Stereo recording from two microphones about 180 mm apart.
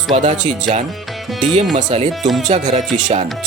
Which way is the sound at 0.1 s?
40° right (ahead or behind).